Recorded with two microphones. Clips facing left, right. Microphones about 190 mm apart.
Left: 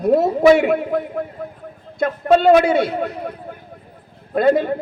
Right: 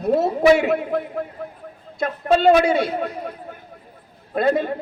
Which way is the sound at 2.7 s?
55° left (ahead or behind).